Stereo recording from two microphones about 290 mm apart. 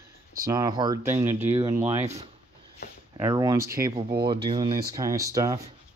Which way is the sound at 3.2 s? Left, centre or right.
Centre.